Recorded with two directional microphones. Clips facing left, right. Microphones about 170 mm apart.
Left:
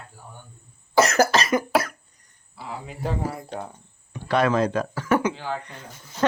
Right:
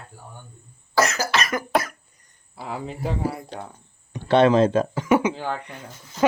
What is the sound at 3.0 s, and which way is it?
Speech, centre (ahead or behind).